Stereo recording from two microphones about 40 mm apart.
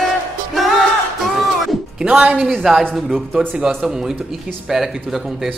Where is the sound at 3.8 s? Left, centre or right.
Centre.